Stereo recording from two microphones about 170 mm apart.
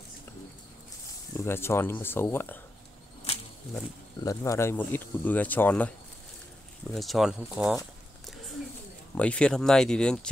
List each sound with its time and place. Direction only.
1.4 s speech: 15° left (ahead or behind)
3.3 s a sound: 35° left (ahead or behind)
4.2 s speech: 20° left (ahead or behind); by 7.8 s 5° right (ahead or behind)
9.1 s speech: 5° left (ahead or behind)